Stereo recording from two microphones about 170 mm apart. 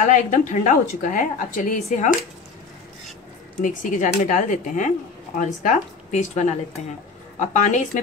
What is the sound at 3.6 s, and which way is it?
A woman's voice, 50° left (ahead or behind).